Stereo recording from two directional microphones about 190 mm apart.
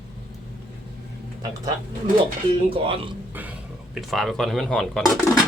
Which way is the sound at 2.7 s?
30° right (ahead or behind).